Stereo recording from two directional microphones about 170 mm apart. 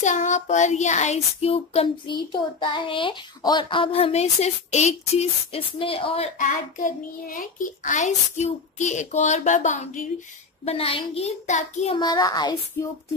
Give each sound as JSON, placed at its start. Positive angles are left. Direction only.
{"t": 0.0, "sound": "child singing", "side_deg": 45}
{"t": 6.3, "sound": "a child's voice", "side_deg": 50}
{"t": 10.6, "sound": "child singing", "side_deg": 35}
{"t": 12.0, "sound": "a child's voice", "side_deg": 25}